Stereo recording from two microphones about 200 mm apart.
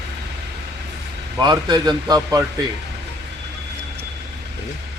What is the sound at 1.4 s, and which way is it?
A man's voice, 20° right (ahead or behind).